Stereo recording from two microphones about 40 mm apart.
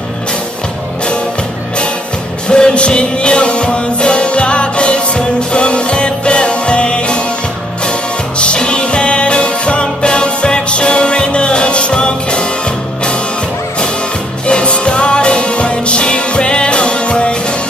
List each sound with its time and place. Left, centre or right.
2.4 s music: left
8.4 s music: left
14.4 s music: left